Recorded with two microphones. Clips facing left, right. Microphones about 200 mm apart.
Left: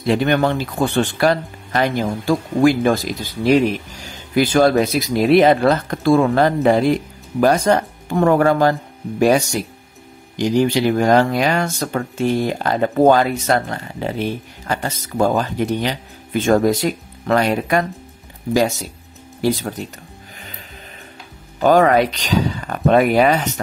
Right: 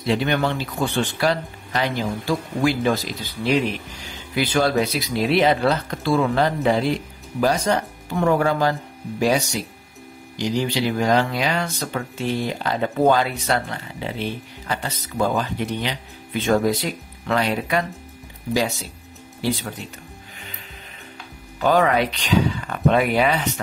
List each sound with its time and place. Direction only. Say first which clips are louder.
0.0 s speech: left 5 dB; 50° left (ahead or behind)
19.4 s speech: left 5 dB; 45° left (ahead or behind)
21.5 s speech: left 5 dB; 45° left (ahead or behind)